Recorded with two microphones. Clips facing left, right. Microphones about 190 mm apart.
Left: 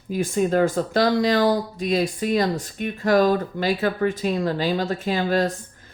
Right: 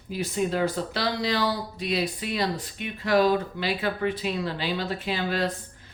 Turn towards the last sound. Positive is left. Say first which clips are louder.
# left 6 dB
turn(degrees=45)  # may be behind; listen again after turning